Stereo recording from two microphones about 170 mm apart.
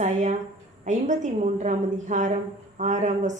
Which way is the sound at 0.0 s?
45° right (ahead or behind).